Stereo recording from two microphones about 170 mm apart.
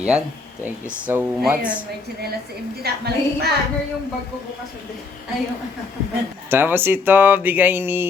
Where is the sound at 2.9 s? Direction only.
65° right (ahead or behind).